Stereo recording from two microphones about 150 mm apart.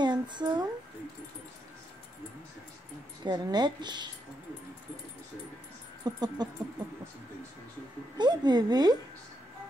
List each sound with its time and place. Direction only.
0.0 s a sound: 30° right (ahead or behind)
3.3 s speech: 30° right (ahead or behind)
6.0 s speech: 25° right (ahead or behind)
8.2 s speech: 30° right (ahead or behind)